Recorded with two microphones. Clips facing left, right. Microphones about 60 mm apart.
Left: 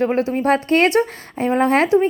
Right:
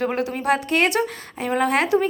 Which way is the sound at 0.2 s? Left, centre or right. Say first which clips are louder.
Left 4 dB; left.